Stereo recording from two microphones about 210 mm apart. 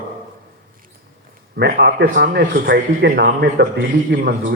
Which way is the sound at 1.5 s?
50° right (ahead or behind).